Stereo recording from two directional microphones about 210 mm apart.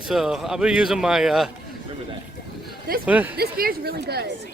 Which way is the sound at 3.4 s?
45° right (ahead or behind).